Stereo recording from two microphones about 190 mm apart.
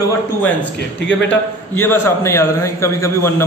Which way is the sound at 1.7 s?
15° left (ahead or behind).